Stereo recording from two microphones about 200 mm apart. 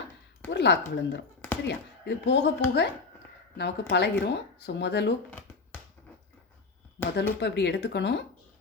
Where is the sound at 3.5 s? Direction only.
55° left (ahead or behind).